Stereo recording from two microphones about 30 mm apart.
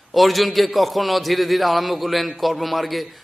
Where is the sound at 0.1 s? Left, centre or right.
Centre.